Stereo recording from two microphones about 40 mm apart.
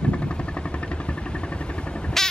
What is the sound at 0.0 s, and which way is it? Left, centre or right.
Vehicle, left.